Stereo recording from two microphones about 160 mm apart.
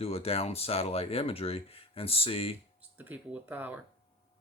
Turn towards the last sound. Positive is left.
turn(degrees=-10)  # may be behind; listen again after turning